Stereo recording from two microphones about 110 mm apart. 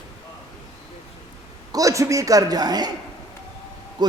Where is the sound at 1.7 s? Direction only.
30° right (ahead or behind).